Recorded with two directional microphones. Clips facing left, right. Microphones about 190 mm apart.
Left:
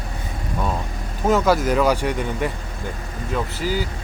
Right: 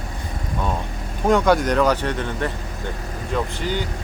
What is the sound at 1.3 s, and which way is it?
Speech, 5° left (ahead or behind).